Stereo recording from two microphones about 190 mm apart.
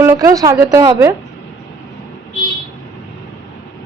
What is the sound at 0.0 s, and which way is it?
A woman's voice, 15° right (ahead or behind).